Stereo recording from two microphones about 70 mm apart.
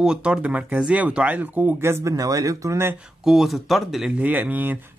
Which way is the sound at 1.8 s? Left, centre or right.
Right.